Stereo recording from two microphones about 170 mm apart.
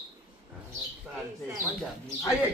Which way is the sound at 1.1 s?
5° right (ahead or behind).